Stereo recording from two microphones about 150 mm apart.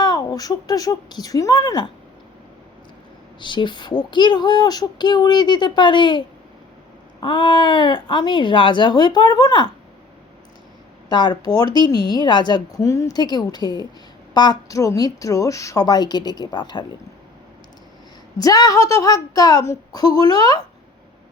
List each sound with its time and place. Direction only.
0.0 s a woman's voice: 25° left (ahead or behind)
3.4 s speech: 30° left (ahead or behind)
11.1 s speech: 30° left (ahead or behind)
18.3 s speech: 25° left (ahead or behind)